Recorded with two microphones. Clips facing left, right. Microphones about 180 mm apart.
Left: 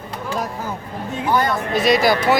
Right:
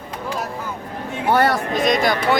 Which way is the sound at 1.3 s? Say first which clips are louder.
Right 2 dB; 70° right (ahead or behind).